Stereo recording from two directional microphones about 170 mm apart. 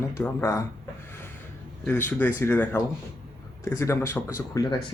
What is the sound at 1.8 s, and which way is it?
Speech, 10° left (ahead or behind).